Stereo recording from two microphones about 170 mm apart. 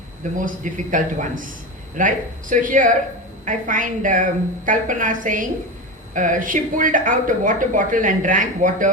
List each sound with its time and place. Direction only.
0.3 s speech: 50° right (ahead or behind)